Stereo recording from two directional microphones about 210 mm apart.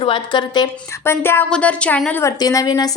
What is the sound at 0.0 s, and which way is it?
A woman's voice, 20° left (ahead or behind).